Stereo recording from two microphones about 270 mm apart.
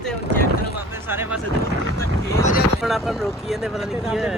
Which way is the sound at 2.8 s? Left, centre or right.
Centre.